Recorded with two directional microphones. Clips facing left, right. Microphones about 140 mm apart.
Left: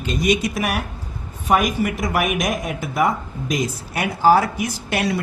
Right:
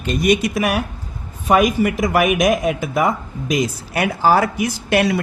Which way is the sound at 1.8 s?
90° right.